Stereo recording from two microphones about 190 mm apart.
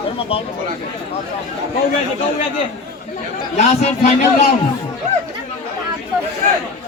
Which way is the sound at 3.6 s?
35° left (ahead or behind).